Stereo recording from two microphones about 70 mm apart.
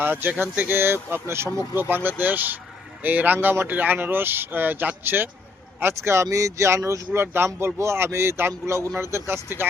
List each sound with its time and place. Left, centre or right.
0.0 s speech: right
5.8 s speech: right
7.1 s speech: right